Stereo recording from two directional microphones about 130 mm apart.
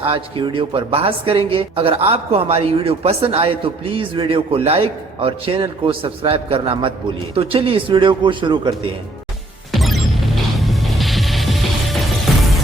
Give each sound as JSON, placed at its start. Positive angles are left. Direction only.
{"t": 0.0, "sound": "a woman's voice", "side_deg": -45}
{"t": 9.7, "sound": "music", "side_deg": 0}
{"t": 10.6, "sound": "mechanisms", "side_deg": 0}